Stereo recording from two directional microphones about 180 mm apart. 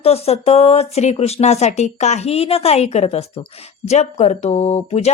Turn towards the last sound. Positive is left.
turn(degrees=35)  # may be behind; listen again after turning